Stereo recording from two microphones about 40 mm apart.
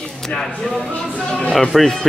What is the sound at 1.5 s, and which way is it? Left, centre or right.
Speech, centre.